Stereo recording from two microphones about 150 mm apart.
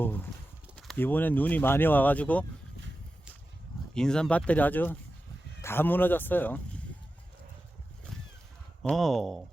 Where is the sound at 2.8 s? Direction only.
90° right.